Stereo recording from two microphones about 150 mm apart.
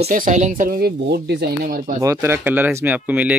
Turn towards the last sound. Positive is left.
turn(degrees=-10)  # may be behind; listen again after turning